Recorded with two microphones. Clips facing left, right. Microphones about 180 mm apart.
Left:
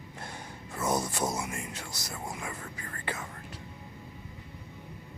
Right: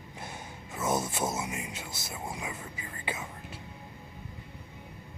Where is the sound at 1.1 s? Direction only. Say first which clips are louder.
Even; 25° right (ahead or behind).